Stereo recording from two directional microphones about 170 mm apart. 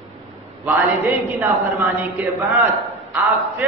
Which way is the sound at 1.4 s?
15° right (ahead or behind).